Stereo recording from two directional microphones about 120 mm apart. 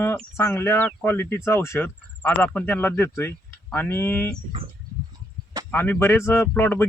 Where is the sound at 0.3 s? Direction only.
20° left (ahead or behind).